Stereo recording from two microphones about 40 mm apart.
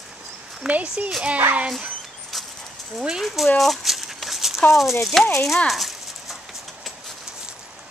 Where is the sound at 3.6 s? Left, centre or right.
Centre.